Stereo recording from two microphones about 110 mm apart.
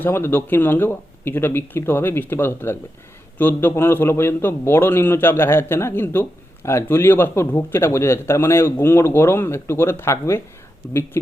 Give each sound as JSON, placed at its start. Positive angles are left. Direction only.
{"t": 0.0, "sound": "a man's voice", "side_deg": 20}